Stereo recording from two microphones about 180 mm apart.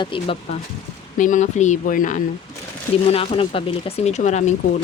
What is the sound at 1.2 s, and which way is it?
Speech, 45° left (ahead or behind).